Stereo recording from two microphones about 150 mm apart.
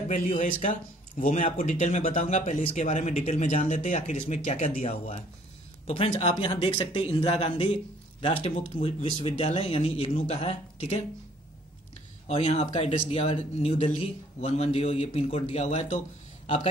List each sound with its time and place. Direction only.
0.1 s a man's voice: 55° left (ahead or behind)
12.3 s speech: 40° left (ahead or behind)